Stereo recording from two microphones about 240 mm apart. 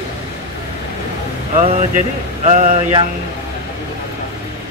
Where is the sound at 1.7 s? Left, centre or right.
Right.